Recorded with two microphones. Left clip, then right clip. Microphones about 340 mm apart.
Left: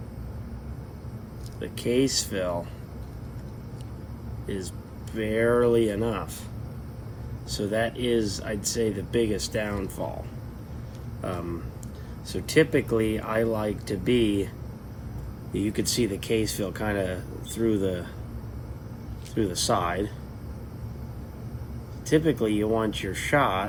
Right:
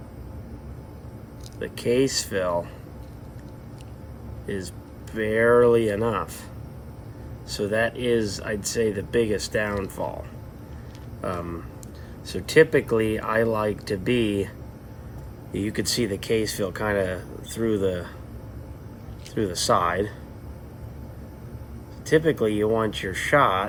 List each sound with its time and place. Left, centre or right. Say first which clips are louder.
1.5 s speech: right 3 dB; centre
4.4 s speech: right 2 dB; centre
7.6 s speech: right 3 dB; centre
11.2 s speech: right 3 dB; centre
15.5 s speech: right 1 dB; centre
19.3 s speech: right 3 dB; centre
22.0 s speech: right 3 dB; centre